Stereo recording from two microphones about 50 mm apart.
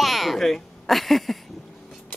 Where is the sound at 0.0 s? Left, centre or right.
Centre.